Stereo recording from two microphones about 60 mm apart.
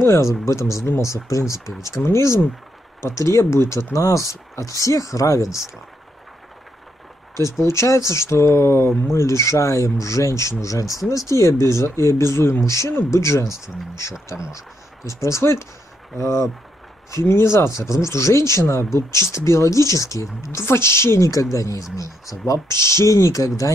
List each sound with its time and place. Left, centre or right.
0.0 s speech: left
7.6 s speech: left
14.3 s speech: centre
15.0 s speech: left
17.1 s speech: left
20.6 s speech: left
21.3 s speech: left
22.5 s speech: left